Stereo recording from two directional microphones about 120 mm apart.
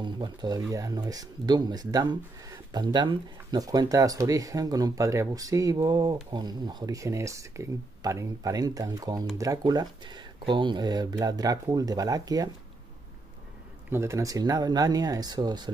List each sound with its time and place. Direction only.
0.0 s speech: 35° right (ahead or behind)
13.8 s speech: 20° right (ahead or behind)